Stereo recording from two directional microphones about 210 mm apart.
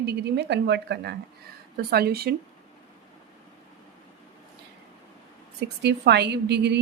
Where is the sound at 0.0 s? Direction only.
50° right (ahead or behind).